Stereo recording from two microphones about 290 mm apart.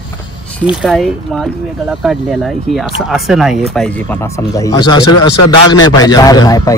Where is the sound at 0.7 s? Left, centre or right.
Centre.